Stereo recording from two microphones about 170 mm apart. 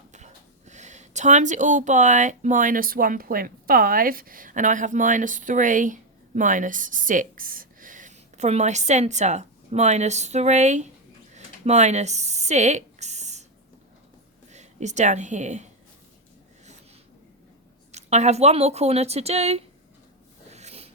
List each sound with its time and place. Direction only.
0.7 s speech: 45° right (ahead or behind)
11.3 s a sound: 40° right (ahead or behind)
14.5 s a woman's voice: 45° right (ahead or behind)
17.9 s speech: 40° right (ahead or behind)
20.5 s snort: 40° right (ahead or behind)